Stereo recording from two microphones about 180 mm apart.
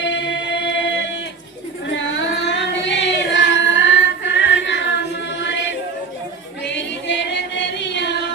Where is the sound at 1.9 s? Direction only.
90° left.